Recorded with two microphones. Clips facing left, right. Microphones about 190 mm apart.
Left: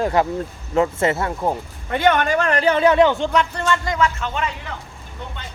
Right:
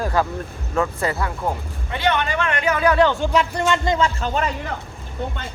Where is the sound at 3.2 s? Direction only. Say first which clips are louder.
Right 1 dB; 10° right (ahead or behind); by 4.5 s 40° right (ahead or behind).